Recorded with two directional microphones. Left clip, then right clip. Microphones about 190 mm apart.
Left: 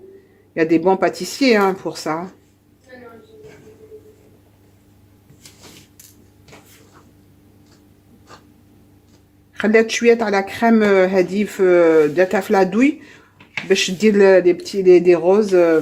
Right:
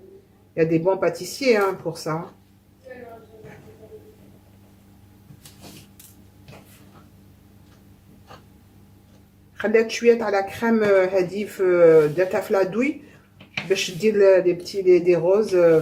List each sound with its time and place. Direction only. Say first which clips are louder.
0.5 s speech: left 4 dB; 55° left (ahead or behind)
9.6 s speech: left 5 dB; 55° left (ahead or behind)